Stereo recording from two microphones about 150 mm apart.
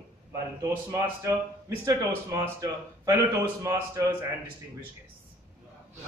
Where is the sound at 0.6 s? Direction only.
20° right (ahead or behind).